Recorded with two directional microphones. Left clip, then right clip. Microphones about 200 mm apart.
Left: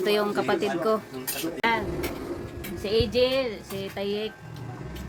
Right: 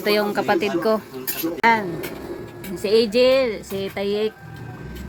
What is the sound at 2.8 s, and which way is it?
Speech, 35° right (ahead or behind).